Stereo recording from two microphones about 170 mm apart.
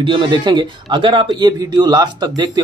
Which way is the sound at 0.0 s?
30° right (ahead or behind).